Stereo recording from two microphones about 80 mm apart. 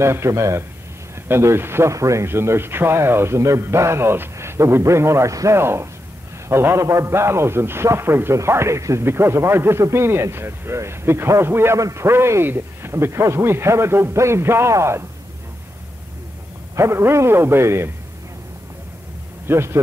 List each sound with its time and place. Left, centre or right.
0.0 s a man's voice: right
16.7 s a man's voice: right
19.4 s speech: right